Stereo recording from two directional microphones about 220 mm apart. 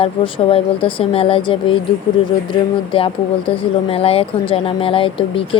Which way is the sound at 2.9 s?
25° left (ahead or behind).